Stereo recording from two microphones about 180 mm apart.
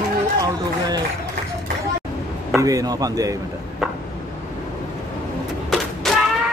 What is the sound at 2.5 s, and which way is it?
Speech, 20° right (ahead or behind).